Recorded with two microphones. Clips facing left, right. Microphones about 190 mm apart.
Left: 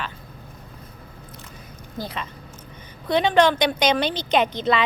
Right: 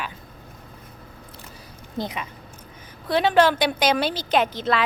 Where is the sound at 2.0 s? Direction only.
15° right (ahead or behind).